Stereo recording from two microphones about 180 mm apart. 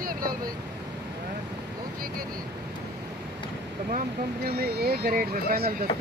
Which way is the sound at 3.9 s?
55° right (ahead or behind).